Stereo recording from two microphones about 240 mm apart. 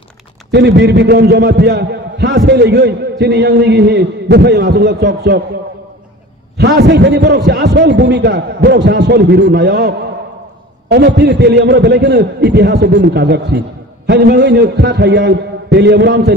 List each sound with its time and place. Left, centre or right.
0.5 s a man's voice: right
6.5 s a man's voice: right